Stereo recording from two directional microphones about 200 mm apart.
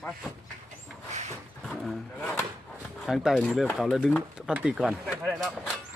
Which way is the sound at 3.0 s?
Centre (ahead or behind).